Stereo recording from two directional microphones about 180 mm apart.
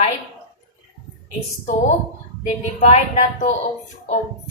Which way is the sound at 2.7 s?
40° left (ahead or behind).